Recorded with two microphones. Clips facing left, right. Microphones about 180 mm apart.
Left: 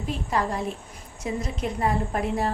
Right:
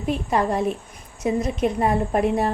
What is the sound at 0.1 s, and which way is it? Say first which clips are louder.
Speech: right 5 dB; 20° right (ahead or behind).